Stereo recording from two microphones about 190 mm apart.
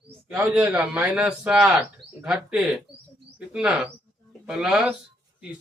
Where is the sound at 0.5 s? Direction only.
5° right (ahead or behind).